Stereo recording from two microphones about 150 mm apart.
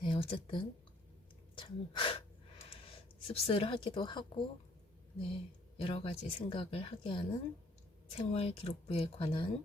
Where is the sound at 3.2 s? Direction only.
40° left (ahead or behind).